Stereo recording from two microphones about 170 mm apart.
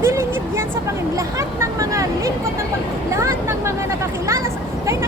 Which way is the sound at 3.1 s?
15° right (ahead or behind).